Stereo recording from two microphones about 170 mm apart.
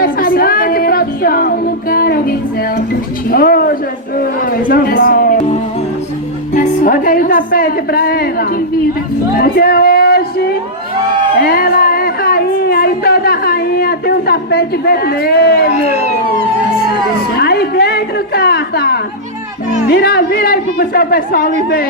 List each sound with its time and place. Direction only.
0.0 s music: 60° left (ahead or behind)
3.2 s a sound: 60° left (ahead or behind)
6.5 s speech: 50° left (ahead or behind)
9.4 s a sound: 65° left (ahead or behind)
11.3 s music: 60° left (ahead or behind)
15.7 s speech: 40° left (ahead or behind)
17.3 s music: 70° left (ahead or behind)
19.9 s speech: 70° left (ahead or behind)